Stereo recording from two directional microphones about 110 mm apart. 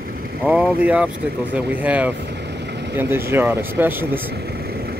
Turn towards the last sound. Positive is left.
turn(degrees=-20)  # may be behind; listen again after turning